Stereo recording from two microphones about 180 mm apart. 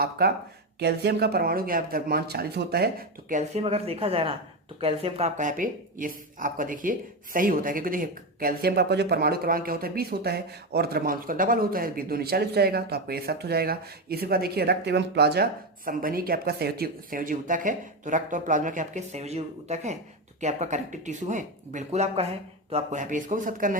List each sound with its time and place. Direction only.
0.2 s speech: 55° right (ahead or behind)
3.3 s speech: 35° right (ahead or behind); by 15.4 s 65° right (ahead or behind)
15.9 s speech: 50° right (ahead or behind)